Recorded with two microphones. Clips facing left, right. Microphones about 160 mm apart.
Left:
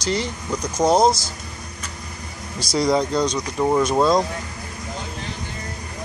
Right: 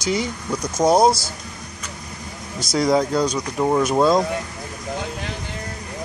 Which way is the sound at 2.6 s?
Centre (ahead or behind).